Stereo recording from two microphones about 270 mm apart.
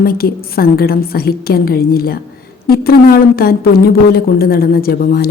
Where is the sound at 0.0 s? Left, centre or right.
Left.